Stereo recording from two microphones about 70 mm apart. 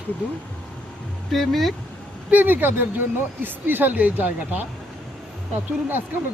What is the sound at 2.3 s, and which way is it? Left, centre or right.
Speech, right.